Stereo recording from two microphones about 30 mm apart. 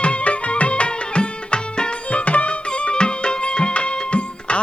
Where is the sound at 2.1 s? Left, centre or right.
Left.